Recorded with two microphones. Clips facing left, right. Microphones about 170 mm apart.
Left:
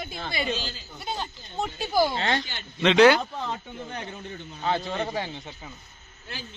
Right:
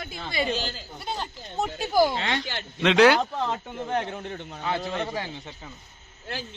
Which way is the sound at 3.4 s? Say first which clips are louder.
Right 4 dB; 80° right.